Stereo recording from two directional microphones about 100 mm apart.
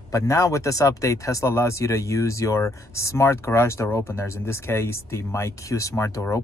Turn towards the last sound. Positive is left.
turn(degrees=30)  # may be behind; listen again after turning